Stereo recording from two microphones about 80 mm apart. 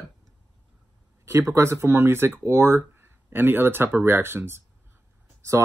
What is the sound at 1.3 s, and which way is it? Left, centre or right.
Speech, right.